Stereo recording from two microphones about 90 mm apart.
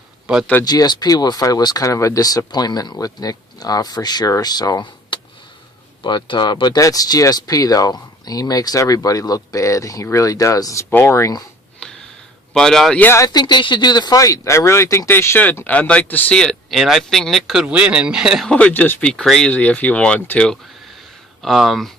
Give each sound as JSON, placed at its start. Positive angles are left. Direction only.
{"t": 0.3, "sound": "speech", "side_deg": -10}
{"t": 0.6, "sound": "speech", "side_deg": 50}
{"t": 5.1, "sound": "a sound", "side_deg": 60}
{"t": 6.0, "sound": "speech", "side_deg": 60}
{"t": 11.8, "sound": "a sound", "side_deg": 10}
{"t": 12.5, "sound": "speech", "side_deg": 5}
{"t": 13.1, "sound": "speech", "side_deg": 40}
{"t": 13.4, "sound": "speech", "side_deg": 60}
{"t": 16.3, "sound": "speech", "side_deg": 5}
{"t": 17.7, "sound": "speech", "side_deg": -15}
{"t": 18.4, "sound": "speech", "side_deg": 15}
{"t": 21.4, "sound": "speech", "side_deg": 0}